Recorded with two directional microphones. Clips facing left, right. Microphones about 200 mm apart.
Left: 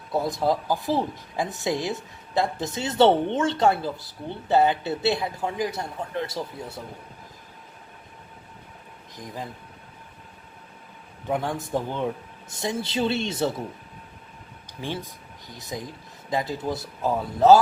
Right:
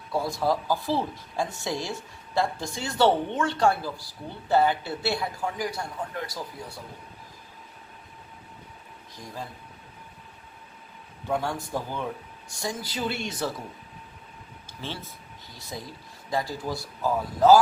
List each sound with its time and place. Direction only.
0.1 s speech: 20° left (ahead or behind)
9.1 s speech: 15° left (ahead or behind)
11.3 s speech: 20° left (ahead or behind)
14.7 s speech: 15° left (ahead or behind)